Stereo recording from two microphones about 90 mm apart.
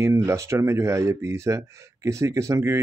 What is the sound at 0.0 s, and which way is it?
Speech, 35° right (ahead or behind).